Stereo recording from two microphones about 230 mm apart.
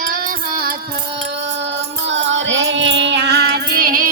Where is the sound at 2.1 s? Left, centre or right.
Right.